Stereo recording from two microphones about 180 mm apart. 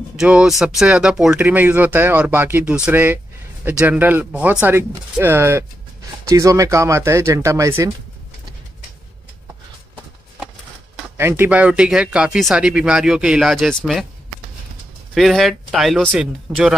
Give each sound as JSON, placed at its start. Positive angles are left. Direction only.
{"t": 0.1, "sound": "speech", "side_deg": -5}
{"t": 11.1, "sound": "speech", "side_deg": -10}
{"t": 15.1, "sound": "speech", "side_deg": 0}